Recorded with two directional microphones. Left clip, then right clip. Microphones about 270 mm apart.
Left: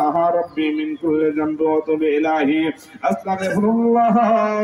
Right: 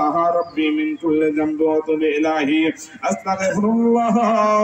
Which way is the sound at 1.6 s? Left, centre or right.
Centre.